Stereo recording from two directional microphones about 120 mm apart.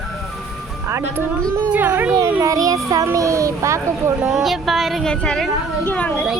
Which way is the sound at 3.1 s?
25° right (ahead or behind).